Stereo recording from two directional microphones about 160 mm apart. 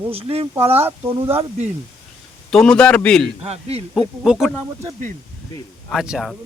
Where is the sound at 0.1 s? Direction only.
35° right (ahead or behind).